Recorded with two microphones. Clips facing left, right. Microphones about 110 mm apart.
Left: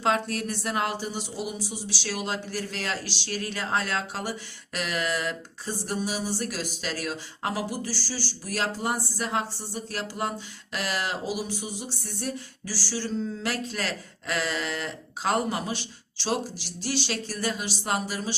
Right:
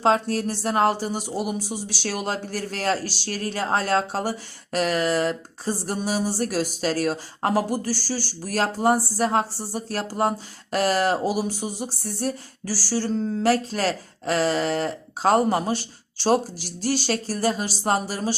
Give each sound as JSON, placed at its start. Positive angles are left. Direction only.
{"t": 0.0, "sound": "speech", "side_deg": -35}